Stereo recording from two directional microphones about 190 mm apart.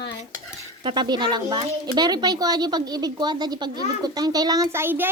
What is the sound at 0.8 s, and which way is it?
Speech, 25° right (ahead or behind).